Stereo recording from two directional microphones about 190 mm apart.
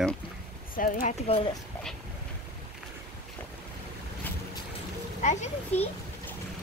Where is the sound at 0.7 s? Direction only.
45° left (ahead or behind).